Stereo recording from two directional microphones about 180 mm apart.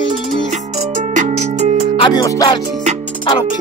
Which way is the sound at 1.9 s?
25° left (ahead or behind).